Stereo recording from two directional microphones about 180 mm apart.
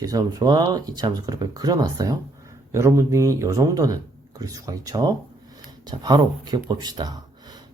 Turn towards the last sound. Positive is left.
turn(degrees=-20)  # may be behind; listen again after turning